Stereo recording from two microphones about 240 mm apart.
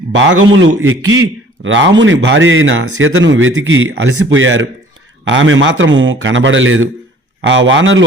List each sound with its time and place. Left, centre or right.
0.1 s a man's voice: right